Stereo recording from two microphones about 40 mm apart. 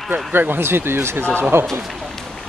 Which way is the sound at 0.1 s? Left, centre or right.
Right.